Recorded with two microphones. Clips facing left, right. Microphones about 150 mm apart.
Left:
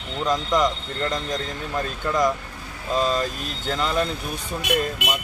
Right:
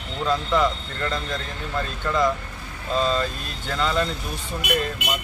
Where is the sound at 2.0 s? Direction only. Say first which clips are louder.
Even; 15° left (ahead or behind).